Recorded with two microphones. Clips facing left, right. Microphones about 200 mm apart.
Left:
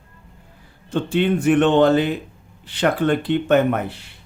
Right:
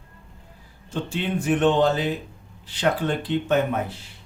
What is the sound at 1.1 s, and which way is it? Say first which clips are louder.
Speech: left 7 dB; 65° left (ahead or behind).